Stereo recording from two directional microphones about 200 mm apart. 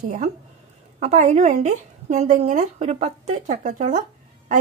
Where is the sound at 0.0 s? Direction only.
35° right (ahead or behind).